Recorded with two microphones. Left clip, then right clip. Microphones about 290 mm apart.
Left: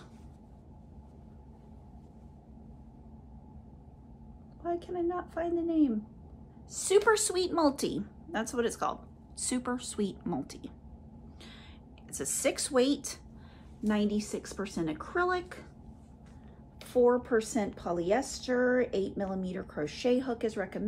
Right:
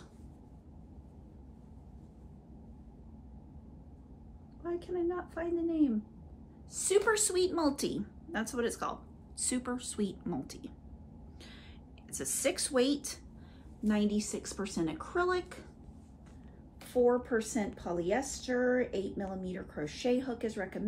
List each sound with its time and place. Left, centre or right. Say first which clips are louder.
4.6 s a woman's voice: left 2 dB; centre
12.1 s a woman's voice: left 2 dB; centre
16.9 s a woman's voice: left 3 dB; centre